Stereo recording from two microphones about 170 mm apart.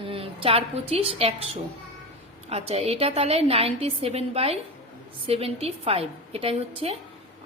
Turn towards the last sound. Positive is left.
turn(degrees=-35)  # may be behind; listen again after turning